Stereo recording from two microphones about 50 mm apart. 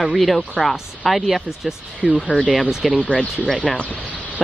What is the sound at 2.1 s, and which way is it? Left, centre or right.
Speech, left.